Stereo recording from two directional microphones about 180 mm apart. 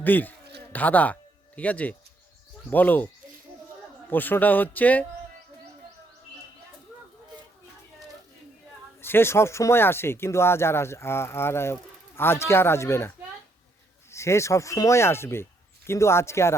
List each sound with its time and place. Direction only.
0.0 s speech: 10° left (ahead or behind)
4.1 s speech: 10° left (ahead or behind)
9.0 s speech: 15° left (ahead or behind)
14.1 s speech: 15° left (ahead or behind)